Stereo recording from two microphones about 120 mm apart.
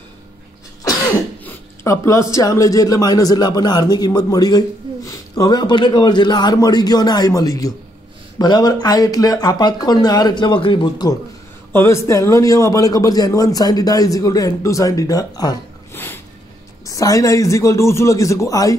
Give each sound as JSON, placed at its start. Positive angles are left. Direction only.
{"t": 1.9, "sound": "a man's voice", "side_deg": 25}
{"t": 11.7, "sound": "a man's voice", "side_deg": 20}
{"t": 15.9, "sound": "a sound", "side_deg": 15}
{"t": 16.8, "sound": "a man's voice", "side_deg": 30}